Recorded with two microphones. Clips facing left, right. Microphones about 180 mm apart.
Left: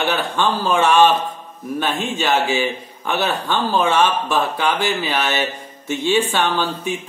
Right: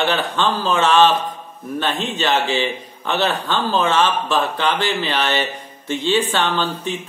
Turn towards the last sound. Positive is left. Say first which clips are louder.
# left 1 dB
turn(degrees=10)  # may be behind; listen again after turning